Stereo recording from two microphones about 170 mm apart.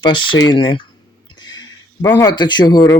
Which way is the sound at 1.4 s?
25° left (ahead or behind).